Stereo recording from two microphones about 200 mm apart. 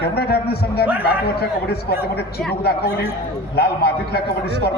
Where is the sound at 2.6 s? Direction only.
55° left (ahead or behind).